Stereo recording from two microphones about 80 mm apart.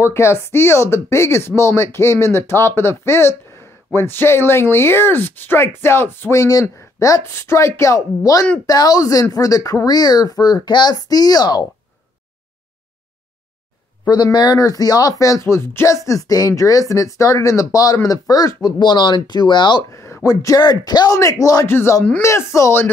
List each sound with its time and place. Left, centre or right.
0.1 s speech: left
6.4 s speech: left
14.0 s speech: left
15.4 s speech: left
18.8 s speech: left
19.9 s a sound: left
20.2 s speech: left
21.1 s speech: left
21.6 s speech: left